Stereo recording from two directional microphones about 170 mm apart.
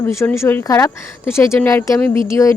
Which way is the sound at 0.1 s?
15° left (ahead or behind).